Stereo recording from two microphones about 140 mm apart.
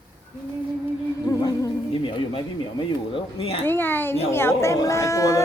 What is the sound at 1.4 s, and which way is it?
Humming, 25° left (ahead or behind).